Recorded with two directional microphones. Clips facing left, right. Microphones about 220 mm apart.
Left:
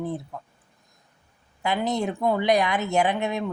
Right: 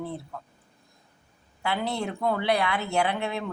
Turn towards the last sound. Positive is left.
turn(degrees=15)  # may be behind; listen again after turning